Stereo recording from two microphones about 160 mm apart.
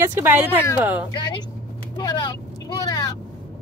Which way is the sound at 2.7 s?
25° left (ahead or behind).